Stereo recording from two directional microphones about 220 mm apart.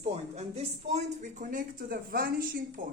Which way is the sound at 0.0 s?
30° right (ahead or behind).